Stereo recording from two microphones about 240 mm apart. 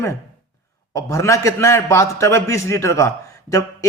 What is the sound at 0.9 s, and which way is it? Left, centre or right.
Speech, centre.